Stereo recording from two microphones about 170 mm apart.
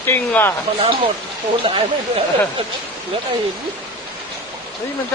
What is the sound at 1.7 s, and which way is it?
Speech, 30° right (ahead or behind).